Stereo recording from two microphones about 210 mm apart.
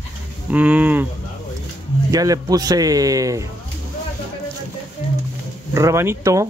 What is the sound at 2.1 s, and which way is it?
Speech, 15° right (ahead or behind).